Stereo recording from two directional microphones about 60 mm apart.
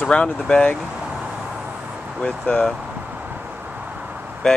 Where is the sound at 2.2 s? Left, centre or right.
Centre.